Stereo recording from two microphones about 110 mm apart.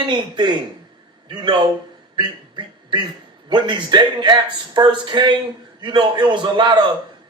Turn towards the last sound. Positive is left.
turn(degrees=-45)  # may be behind; listen again after turning